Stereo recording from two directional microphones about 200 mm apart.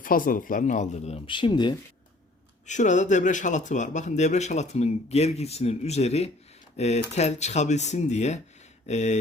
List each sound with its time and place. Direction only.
0.0 s speech: 45° left (ahead or behind); by 1.7 s 25° left (ahead or behind)
2.6 s speech: 35° left (ahead or behind)